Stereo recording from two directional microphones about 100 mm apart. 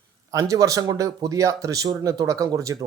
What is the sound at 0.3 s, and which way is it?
Speech, 35° right (ahead or behind).